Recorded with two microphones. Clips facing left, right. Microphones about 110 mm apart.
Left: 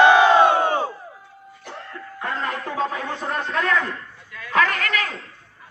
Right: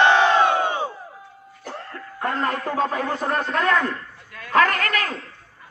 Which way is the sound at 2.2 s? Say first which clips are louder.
Right 3 dB; 45° right (ahead or behind).